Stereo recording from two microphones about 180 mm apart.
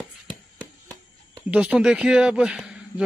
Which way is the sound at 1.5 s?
5° right (ahead or behind).